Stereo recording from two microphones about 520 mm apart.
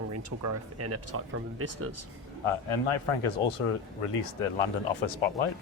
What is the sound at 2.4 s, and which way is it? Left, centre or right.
A man's voice, left.